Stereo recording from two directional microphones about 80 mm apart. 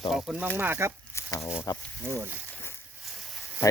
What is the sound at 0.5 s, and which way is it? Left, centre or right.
Speech, right.